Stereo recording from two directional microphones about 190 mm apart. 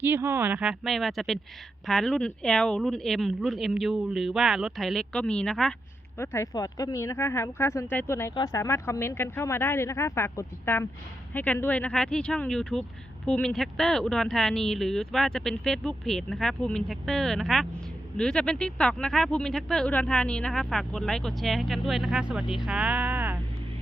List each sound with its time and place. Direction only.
0.0 s speech: 10° right (ahead or behind)
6.1 s speech: 15° left (ahead or behind); by 23.4 s 10° right (ahead or behind)